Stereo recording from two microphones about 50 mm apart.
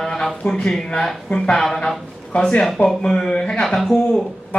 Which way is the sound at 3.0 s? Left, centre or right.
Centre.